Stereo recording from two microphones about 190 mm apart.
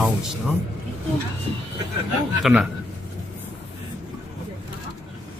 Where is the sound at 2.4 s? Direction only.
Centre (ahead or behind).